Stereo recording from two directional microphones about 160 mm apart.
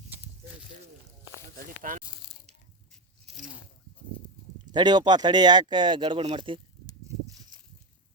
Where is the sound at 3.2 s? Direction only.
50° right (ahead or behind).